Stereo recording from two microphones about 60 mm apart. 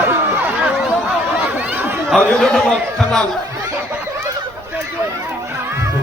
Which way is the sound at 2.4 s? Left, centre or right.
Centre.